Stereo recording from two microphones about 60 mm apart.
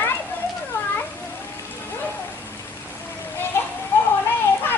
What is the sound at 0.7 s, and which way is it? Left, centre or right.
Cat, left.